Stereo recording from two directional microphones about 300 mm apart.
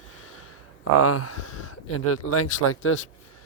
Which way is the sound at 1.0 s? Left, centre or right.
Left.